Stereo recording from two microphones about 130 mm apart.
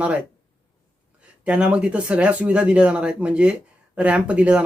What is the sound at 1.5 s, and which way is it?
Speech, 10° right (ahead or behind).